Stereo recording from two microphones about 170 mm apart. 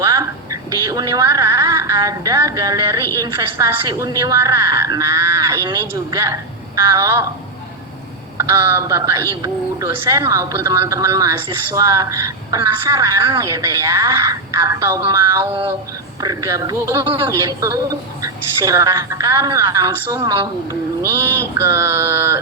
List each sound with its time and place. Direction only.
0.0 s a sound: 20° right (ahead or behind)
0.9 s a woman's voice: 20° right (ahead or behind)
8.4 s a woman's voice: 15° right (ahead or behind)
21.6 s a woman's voice: 15° right (ahead or behind)